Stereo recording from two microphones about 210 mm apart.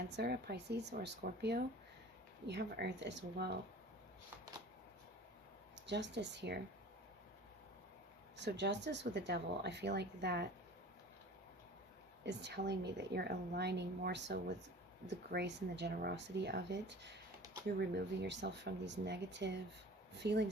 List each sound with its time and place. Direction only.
0.1 s a woman's voice: 50° right (ahead or behind)
5.8 s speech: 55° right (ahead or behind)
8.4 s a woman's voice: 55° right (ahead or behind)
12.2 s a woman's voice: 55° right (ahead or behind)